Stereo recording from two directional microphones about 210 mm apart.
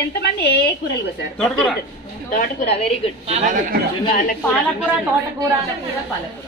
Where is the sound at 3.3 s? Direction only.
35° right (ahead or behind).